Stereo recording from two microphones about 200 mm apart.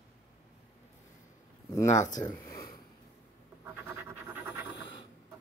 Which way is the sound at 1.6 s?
15° left (ahead or behind).